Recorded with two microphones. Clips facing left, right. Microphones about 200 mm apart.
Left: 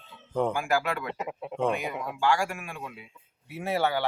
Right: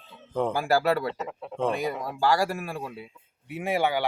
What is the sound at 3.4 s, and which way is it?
Speech, 15° right (ahead or behind).